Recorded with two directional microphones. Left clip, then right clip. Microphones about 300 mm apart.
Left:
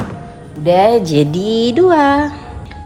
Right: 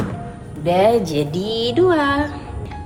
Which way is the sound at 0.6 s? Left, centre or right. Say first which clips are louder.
Left 5 dB; left.